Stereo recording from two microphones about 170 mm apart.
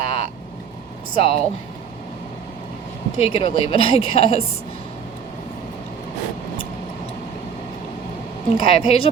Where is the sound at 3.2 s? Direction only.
35° left (ahead or behind).